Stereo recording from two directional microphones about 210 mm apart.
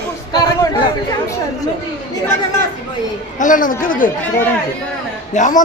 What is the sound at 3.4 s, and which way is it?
Speech, 40° left (ahead or behind).